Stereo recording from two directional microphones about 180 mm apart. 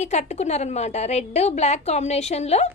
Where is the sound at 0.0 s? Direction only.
40° left (ahead or behind).